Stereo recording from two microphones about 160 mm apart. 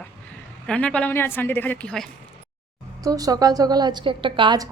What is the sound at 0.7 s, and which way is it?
A woman's voice, 5° left (ahead or behind).